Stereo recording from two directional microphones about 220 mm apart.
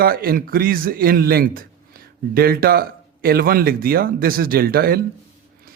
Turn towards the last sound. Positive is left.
turn(degrees=-45)  # may be behind; listen again after turning